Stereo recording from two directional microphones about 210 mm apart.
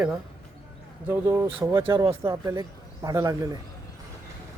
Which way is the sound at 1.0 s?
15° right (ahead or behind).